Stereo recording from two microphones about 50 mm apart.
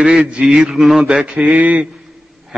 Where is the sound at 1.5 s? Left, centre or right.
Right.